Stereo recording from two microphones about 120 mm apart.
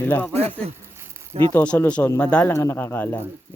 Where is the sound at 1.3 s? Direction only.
60° right (ahead or behind).